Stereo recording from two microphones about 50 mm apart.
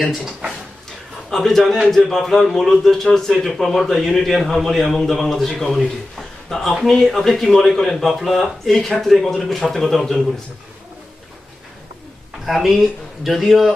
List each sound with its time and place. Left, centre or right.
0.0 s a man's voice: centre
0.8 s a man's voice: centre
6.1 s a sound: centre
6.7 s a man's voice: centre
12.4 s a man's voice: centre